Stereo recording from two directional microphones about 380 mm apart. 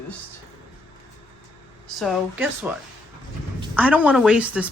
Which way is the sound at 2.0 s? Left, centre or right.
Centre.